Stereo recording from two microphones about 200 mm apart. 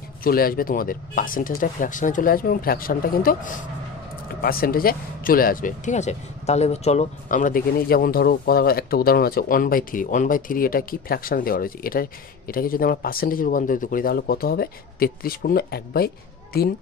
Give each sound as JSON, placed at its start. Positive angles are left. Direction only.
{"t": 0.2, "sound": "speech", "side_deg": 45}